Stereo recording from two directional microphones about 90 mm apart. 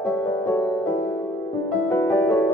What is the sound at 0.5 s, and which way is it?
Music, 20° left (ahead or behind).